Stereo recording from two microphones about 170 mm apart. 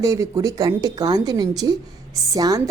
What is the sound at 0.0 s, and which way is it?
A woman's voice, 20° right (ahead or behind).